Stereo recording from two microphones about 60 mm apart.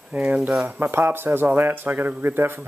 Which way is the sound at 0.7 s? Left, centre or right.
Right.